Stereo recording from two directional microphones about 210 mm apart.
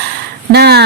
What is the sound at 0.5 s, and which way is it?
Speech, 50° right (ahead or behind).